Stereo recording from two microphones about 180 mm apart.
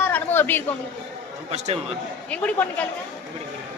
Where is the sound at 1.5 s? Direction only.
40° right (ahead or behind).